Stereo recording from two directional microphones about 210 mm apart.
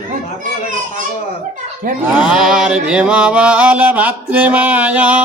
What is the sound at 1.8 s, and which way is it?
Speech, 45° right (ahead or behind).